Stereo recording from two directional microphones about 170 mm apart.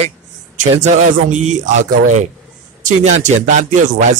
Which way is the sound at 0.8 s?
45° right (ahead or behind).